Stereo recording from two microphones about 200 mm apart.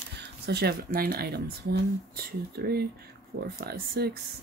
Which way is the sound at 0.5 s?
55° right (ahead or behind).